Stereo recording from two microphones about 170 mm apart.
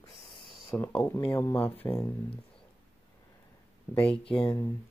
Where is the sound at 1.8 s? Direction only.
20° left (ahead or behind).